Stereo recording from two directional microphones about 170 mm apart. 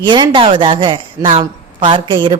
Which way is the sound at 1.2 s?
40° right (ahead or behind).